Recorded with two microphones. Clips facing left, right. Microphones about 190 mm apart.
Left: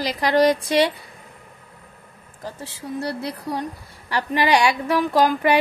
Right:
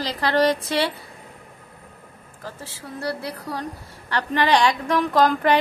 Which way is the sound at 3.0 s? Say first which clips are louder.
Even; 20° left (ahead or behind).